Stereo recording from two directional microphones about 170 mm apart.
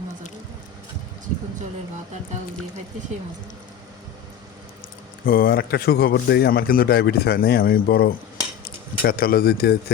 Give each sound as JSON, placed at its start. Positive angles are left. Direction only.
{"t": 5.2, "sound": "speech", "side_deg": 60}